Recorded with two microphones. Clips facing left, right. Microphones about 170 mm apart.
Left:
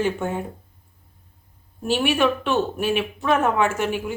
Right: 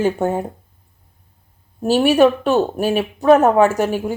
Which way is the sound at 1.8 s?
40° right (ahead or behind).